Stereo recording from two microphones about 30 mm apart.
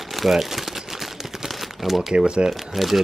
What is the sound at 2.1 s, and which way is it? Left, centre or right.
Speech, right.